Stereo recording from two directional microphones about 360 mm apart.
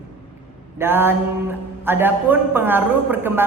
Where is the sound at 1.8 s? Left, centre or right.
Centre.